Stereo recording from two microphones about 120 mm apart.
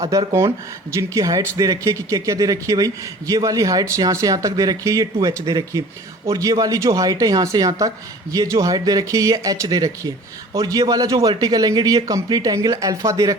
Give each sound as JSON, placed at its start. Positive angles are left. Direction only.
{"t": 0.9, "sound": "a man's voice", "side_deg": -30}